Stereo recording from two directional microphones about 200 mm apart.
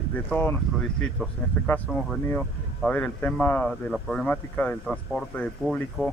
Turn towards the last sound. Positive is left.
turn(degrees=5)  # may be behind; listen again after turning